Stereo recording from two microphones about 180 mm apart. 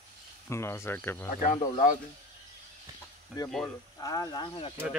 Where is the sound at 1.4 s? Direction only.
45° left (ahead or behind).